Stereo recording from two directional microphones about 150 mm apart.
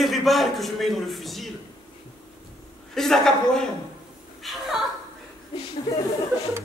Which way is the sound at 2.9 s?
5° left (ahead or behind).